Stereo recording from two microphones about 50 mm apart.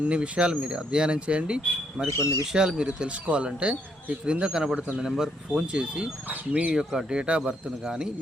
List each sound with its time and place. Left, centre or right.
0.0 s speech: right
2.0 s speech: left
2.5 s speech: centre
5.7 s speech: right
6.2 s speech: right
6.7 s speech: centre